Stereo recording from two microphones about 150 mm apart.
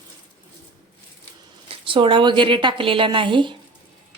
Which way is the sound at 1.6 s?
35° right (ahead or behind).